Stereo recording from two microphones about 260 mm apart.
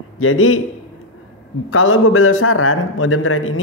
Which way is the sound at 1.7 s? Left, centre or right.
Left.